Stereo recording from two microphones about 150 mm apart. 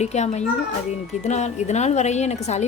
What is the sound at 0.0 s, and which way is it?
A woman's voice, 50° left (ahead or behind).